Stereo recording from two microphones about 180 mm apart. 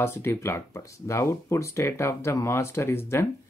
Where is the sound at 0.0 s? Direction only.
15° left (ahead or behind).